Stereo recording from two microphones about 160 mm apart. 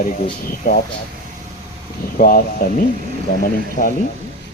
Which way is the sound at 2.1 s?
60° left (ahead or behind).